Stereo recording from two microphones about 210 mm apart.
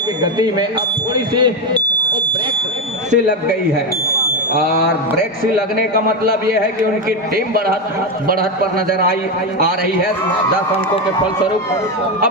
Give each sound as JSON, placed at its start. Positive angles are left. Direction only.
{"t": 0.2, "sound": "speech", "side_deg": -20}
{"t": 5.1, "sound": "a man's voice", "side_deg": -45}
{"t": 7.3, "sound": "a man's voice", "side_deg": -45}